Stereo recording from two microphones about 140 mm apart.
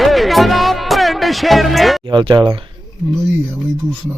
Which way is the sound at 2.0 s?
35° right (ahead or behind).